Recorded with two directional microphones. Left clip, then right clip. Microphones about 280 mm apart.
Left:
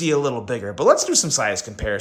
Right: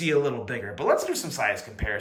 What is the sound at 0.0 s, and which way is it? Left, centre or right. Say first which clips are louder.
Speech: left 4 dB; centre.